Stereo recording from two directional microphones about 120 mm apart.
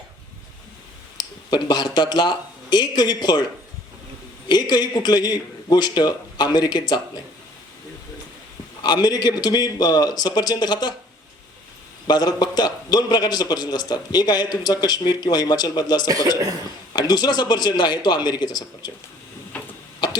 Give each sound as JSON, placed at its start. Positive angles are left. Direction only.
{"t": 1.2, "sound": "speech", "side_deg": 35}
{"t": 4.7, "sound": "a man's voice", "side_deg": 35}
{"t": 8.8, "sound": "a man's voice", "side_deg": 35}
{"t": 12.0, "sound": "a man's voice", "side_deg": 35}
{"t": 16.0, "sound": "a man's voice", "side_deg": -30}
{"t": 16.9, "sound": "a man's voice", "side_deg": 35}
{"t": 19.5, "sound": "tick-tock", "side_deg": 15}